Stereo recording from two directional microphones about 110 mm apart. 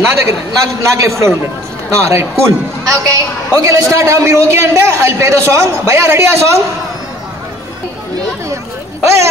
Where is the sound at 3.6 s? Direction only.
30° right (ahead or behind).